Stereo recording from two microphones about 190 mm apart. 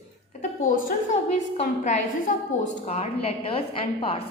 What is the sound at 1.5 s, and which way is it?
A woman's voice, 40° left (ahead or behind).